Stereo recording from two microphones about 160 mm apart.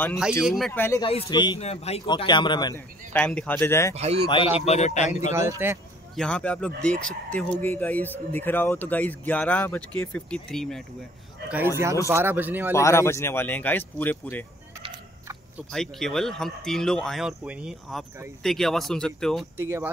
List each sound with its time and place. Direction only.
0.5 s speech: centre (ahead or behind)
0.7 s speech: 15° left (ahead or behind)
1.0 s speech: 30° left (ahead or behind)
1.6 s speech: 40° left (ahead or behind)
2.0 s speech: 30° left (ahead or behind)
3.1 s speech: 10° left (ahead or behind)
3.9 s speech: 40° right (ahead or behind)
4.6 s a man's voice: 45° left (ahead or behind)
5.3 s speech: 15° right (ahead or behind)
6.1 s speech: 5° left (ahead or behind)
11.5 s speech: 15° right (ahead or behind)
12.7 s speech: 15° left (ahead or behind)
15.7 s speech: 5° left (ahead or behind)
19.5 s speech: 15° right (ahead or behind)